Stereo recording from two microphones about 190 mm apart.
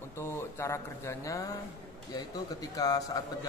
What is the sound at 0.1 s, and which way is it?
A man's voice, 15° left (ahead or behind).